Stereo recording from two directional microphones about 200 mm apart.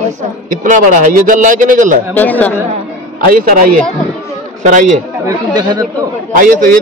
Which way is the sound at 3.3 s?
45° right (ahead or behind).